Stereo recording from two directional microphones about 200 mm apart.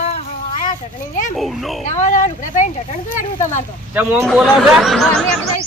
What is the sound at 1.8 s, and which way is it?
Speech, 35° left (ahead or behind).